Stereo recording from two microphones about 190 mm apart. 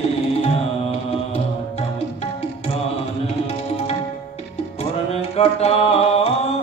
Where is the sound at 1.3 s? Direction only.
30° left (ahead or behind).